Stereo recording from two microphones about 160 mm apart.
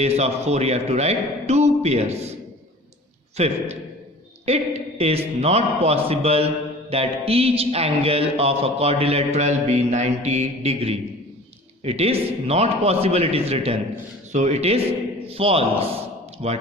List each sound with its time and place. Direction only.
0.0 s a man's voice: 45° right (ahead or behind)